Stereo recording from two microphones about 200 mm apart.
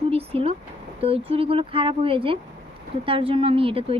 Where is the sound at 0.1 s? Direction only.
30° right (ahead or behind).